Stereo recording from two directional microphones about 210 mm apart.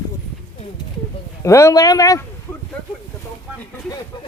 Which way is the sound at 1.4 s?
15° left (ahead or behind).